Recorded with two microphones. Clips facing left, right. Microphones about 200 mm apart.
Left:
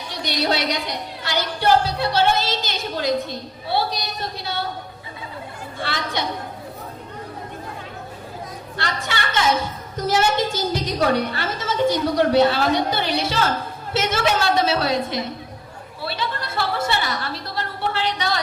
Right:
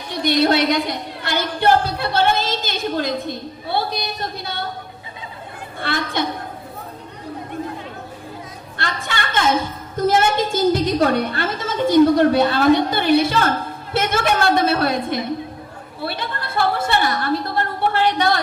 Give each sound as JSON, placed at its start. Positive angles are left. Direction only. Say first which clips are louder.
{"t": 0.1, "sound": "a woman's voice", "louder": "right 7 dB", "side_deg": -55}
{"t": 5.8, "sound": "a woman's voice", "louder": "right 4 dB", "side_deg": -55}
{"t": 8.8, "sound": "a woman's voice", "louder": "right 1 dB", "side_deg": -55}
{"t": 16.0, "sound": "a sound", "louder": "right 1 dB", "side_deg": -55}